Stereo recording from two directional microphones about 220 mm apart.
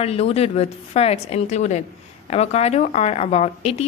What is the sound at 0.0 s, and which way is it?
A woman's voice, 30° left (ahead or behind).